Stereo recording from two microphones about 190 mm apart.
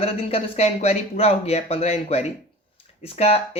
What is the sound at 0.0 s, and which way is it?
Speech, 30° left (ahead or behind).